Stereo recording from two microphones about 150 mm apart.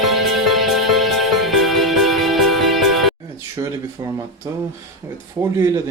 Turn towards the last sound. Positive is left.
turn(degrees=-20)  # may be behind; listen again after turning